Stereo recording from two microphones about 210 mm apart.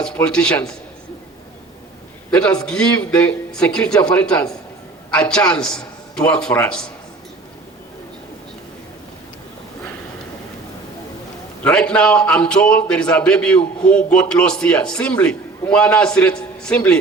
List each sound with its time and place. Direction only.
0.0 s a man's voice: 5° left (ahead or behind)
2.3 s a man's voice: 5° left (ahead or behind)
11.6 s a man's voice: 5° left (ahead or behind)